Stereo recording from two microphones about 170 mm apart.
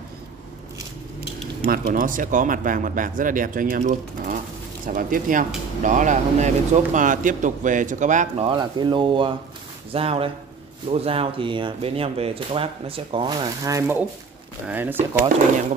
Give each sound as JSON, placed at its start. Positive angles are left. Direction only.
{"t": 1.7, "sound": "speech", "side_deg": -55}
{"t": 8.5, "sound": "speech", "side_deg": -25}